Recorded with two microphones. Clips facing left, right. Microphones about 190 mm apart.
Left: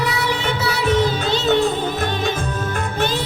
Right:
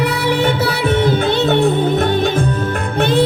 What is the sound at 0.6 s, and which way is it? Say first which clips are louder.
Music: right 3 dB; 60° right (ahead or behind).